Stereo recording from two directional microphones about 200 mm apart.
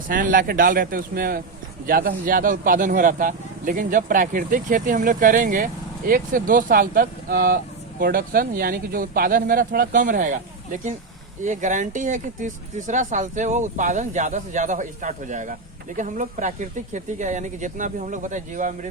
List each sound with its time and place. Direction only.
0.1 s speech: 45° right (ahead or behind)